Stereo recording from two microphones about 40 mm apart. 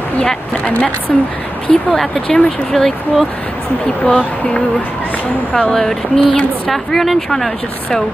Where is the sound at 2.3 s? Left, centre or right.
Centre.